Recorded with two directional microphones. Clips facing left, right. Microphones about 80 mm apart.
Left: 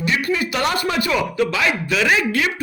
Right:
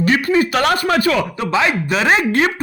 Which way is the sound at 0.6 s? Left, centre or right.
Right.